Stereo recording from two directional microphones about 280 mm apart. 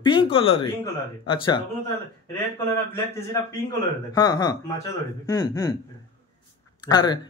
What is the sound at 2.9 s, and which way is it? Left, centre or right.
Speech, centre.